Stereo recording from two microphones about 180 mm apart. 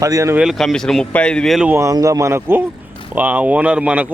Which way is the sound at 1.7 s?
15° right (ahead or behind).